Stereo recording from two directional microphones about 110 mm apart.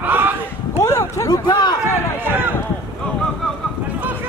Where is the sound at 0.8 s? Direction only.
25° left (ahead or behind).